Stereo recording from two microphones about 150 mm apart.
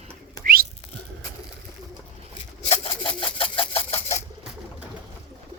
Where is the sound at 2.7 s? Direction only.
35° left (ahead or behind).